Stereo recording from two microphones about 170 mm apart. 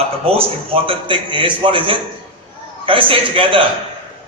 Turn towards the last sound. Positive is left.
turn(degrees=-30)  # may be behind; listen again after turning